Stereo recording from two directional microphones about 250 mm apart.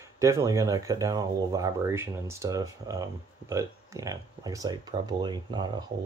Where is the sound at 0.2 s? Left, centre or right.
Centre.